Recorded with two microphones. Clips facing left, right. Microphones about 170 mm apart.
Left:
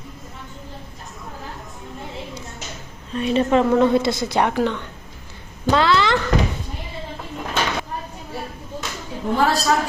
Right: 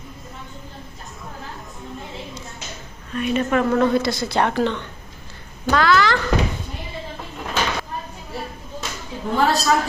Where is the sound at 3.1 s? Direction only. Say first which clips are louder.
Left 2 dB; 30° left (ahead or behind); by 4.8 s 10° left (ahead or behind).